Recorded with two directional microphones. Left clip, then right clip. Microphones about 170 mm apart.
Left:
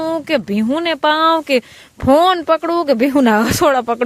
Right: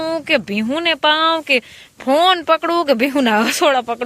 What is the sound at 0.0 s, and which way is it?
Speech, 20° left (ahead or behind).